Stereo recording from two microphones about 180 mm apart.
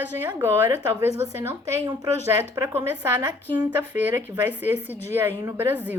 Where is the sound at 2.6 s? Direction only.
15° right (ahead or behind).